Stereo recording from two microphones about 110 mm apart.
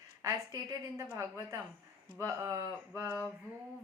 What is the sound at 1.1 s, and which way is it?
Speech, 25° right (ahead or behind).